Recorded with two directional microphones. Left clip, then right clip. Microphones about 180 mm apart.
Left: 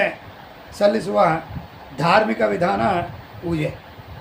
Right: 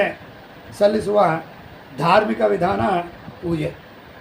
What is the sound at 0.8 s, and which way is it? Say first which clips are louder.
A man's voice: right 1 dB; 20° left (ahead or behind).